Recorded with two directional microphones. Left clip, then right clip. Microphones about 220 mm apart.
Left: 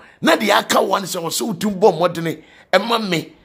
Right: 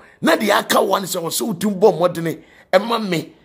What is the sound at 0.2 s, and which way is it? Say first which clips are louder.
Speech: left 1 dB; centre (ahead or behind).